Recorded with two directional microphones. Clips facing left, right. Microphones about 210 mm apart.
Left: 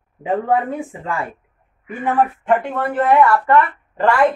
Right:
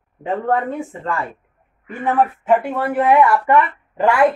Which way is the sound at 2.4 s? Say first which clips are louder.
Right 1 dB; 10° right (ahead or behind).